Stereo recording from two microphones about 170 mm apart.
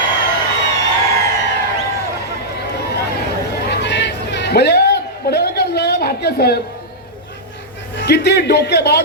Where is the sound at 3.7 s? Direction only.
90° left; by 6.6 s 70° left (ahead or behind).